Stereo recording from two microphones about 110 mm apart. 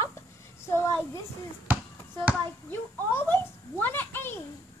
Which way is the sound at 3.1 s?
20° left (ahead or behind).